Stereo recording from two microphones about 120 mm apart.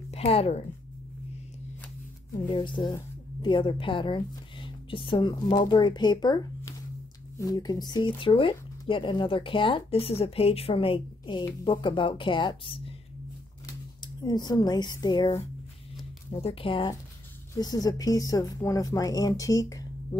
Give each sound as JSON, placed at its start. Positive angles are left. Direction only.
{"t": 0.1, "sound": "a woman's voice", "side_deg": 55}
{"t": 2.5, "sound": "speech", "side_deg": 40}
{"t": 14.0, "sound": "speech", "side_deg": 35}
{"t": 16.3, "sound": "speech", "side_deg": 50}
{"t": 17.6, "sound": "speech", "side_deg": 35}